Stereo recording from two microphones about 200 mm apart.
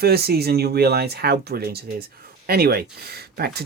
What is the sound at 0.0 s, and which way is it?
Speech, 50° right (ahead or behind).